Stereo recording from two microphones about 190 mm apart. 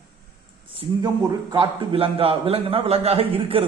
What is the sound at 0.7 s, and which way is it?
A man's voice, 25° right (ahead or behind).